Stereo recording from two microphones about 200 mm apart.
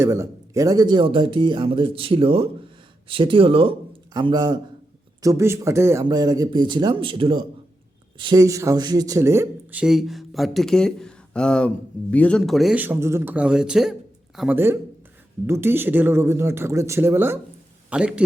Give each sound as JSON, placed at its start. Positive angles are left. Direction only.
{"t": 0.0, "sound": "speech", "side_deg": -15}
{"t": 9.8, "sound": "speech", "side_deg": 0}